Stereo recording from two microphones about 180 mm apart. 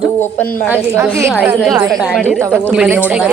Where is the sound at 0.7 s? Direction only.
10° right (ahead or behind).